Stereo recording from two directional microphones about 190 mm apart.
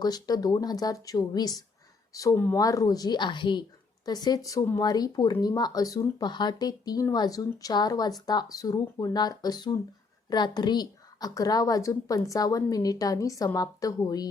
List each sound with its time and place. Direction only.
0.0 s speech: 20° left (ahead or behind)